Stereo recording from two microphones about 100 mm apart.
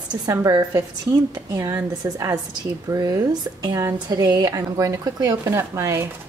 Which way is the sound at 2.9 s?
40° right (ahead or behind).